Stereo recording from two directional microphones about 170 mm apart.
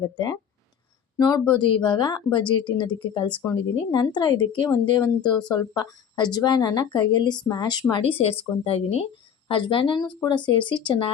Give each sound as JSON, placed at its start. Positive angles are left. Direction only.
{"t": 0.0, "sound": "a woman's voice", "side_deg": 25}